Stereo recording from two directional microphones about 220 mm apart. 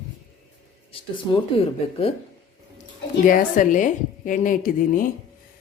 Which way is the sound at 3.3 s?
35° left (ahead or behind).